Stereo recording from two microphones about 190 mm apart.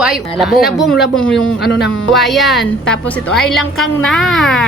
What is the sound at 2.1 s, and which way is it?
A woman's voice, centre (ahead or behind).